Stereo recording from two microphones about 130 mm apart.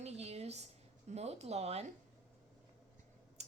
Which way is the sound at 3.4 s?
60° right (ahead or behind).